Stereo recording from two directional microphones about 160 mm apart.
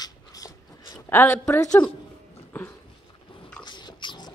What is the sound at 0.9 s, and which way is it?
Speech, 15° left (ahead or behind).